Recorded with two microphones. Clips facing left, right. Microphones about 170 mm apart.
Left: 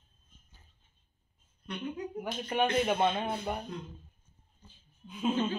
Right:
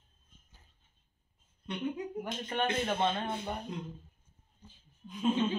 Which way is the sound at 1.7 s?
25° right (ahead or behind).